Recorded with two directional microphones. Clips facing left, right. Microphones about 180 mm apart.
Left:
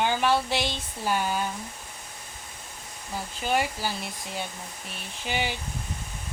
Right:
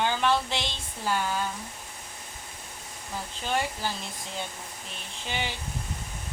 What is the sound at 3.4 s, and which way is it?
Speech, 10° left (ahead or behind).